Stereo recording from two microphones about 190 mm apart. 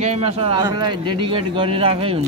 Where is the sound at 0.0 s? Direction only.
35° right (ahead or behind).